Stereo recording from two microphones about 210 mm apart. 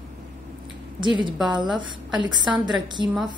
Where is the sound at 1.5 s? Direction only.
20° right (ahead or behind).